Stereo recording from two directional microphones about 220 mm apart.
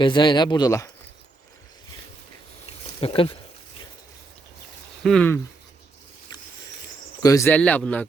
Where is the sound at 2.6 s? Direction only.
25° left (ahead or behind).